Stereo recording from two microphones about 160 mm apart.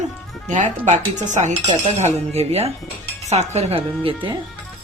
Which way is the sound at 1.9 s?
45° right (ahead or behind).